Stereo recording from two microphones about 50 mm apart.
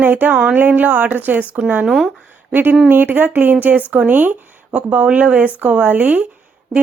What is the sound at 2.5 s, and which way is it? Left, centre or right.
Speech, right.